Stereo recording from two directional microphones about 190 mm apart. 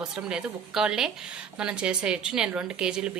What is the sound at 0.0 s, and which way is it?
Speech, 5° right (ahead or behind).